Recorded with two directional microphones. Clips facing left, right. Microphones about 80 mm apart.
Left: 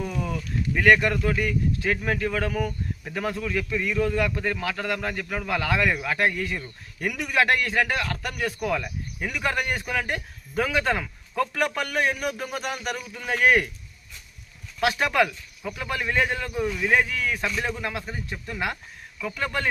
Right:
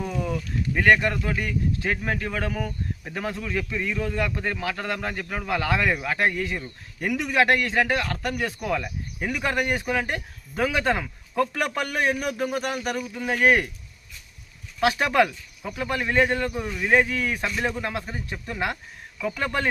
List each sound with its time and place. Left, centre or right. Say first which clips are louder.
0.3 s sheep: right 1 dB; right
1.0 s speech: left 2 dB; right
12.8 s speech: right 3 dB; right
13.1 s speech: even; right
14.8 s speech: right 2 dB; right